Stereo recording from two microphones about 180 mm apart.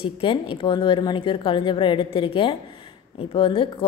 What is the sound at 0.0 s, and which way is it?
A woman's voice, 30° left (ahead or behind).